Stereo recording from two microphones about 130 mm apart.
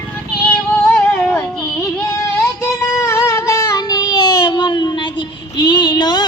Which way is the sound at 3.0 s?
20° left (ahead or behind).